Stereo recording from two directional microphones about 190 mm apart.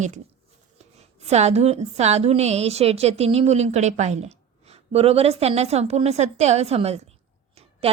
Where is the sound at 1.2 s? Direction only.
35° right (ahead or behind).